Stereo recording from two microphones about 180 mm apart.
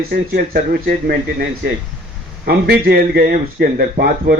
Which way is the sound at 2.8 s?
60° right (ahead or behind).